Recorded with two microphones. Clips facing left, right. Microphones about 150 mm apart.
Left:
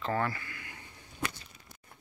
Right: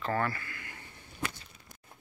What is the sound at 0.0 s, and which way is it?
Speech, 20° left (ahead or behind).